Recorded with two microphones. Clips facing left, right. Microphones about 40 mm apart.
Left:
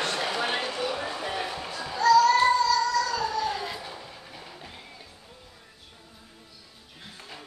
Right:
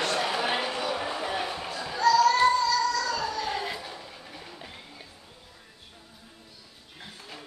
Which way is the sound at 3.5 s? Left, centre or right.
Centre.